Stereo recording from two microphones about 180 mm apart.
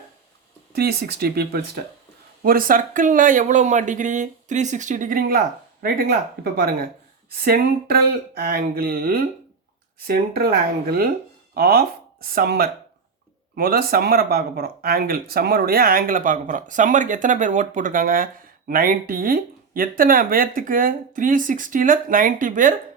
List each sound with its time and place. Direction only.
0.8 s speech: 60° right (ahead or behind)